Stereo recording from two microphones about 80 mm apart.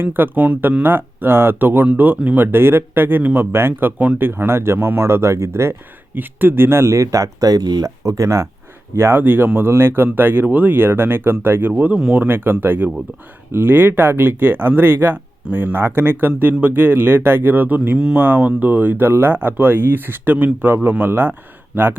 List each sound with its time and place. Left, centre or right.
0.0 s speech: right
3.9 s speech: centre
4.2 s speech: right
9.0 s speech: right